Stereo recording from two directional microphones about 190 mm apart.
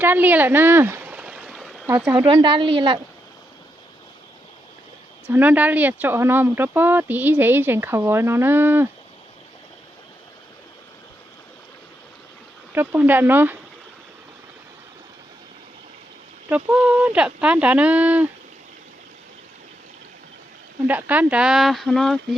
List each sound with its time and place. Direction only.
0.0 s a sound: 10° right (ahead or behind)
1.9 s speech: 5° right (ahead or behind)
2.2 s speech: 25° right (ahead or behind)
5.3 s speech: 10° right (ahead or behind)
12.7 s speech: 10° right (ahead or behind)
16.5 s speech: 10° right (ahead or behind)
20.8 s speech: 10° right (ahead or behind)